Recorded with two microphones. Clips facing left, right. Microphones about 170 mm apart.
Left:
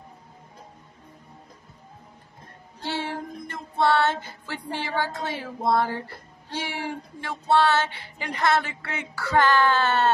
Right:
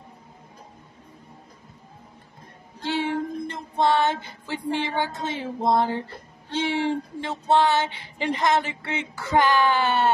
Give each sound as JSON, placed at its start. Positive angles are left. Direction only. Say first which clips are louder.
{"t": 2.8, "sound": "child singing", "louder": "right 5 dB", "side_deg": -15}